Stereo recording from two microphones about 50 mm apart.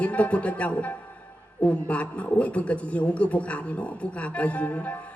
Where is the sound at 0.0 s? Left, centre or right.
Left.